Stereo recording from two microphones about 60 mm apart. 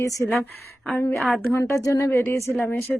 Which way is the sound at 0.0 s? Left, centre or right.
Left.